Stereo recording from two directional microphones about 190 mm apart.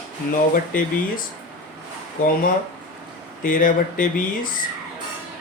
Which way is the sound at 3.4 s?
45° left (ahead or behind).